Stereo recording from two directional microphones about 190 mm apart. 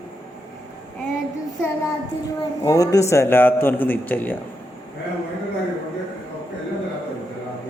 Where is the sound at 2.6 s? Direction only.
15° left (ahead or behind).